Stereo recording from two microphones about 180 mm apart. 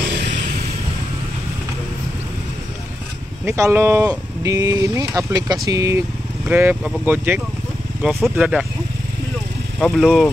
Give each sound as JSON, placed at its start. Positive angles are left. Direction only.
{"t": 3.4, "sound": "speech", "side_deg": -15}
{"t": 9.8, "sound": "speech", "side_deg": 0}